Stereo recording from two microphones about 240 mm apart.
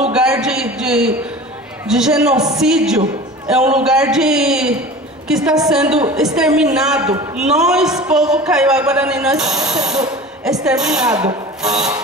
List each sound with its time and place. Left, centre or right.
0.4 s a sound: centre
1.9 s a woman's voice: centre
11.1 s speech: centre
11.6 s a woman's voice: centre